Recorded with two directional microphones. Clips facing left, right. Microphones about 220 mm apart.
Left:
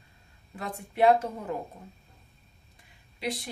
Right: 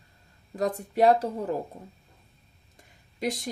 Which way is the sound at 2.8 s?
45° right (ahead or behind).